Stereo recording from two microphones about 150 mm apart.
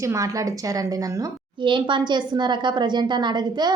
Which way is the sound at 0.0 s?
20° right (ahead or behind).